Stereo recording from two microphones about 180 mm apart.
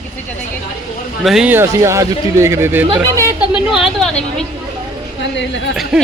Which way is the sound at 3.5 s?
Centre (ahead or behind).